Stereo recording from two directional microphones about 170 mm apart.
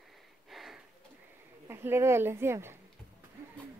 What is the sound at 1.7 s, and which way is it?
Speech, 15° right (ahead or behind).